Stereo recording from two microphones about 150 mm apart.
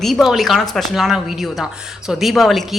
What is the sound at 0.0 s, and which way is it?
Speech, centre (ahead or behind).